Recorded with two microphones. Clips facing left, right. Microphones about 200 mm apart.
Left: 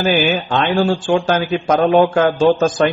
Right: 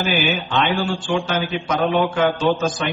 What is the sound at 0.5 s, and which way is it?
A man's voice, 45° left (ahead or behind).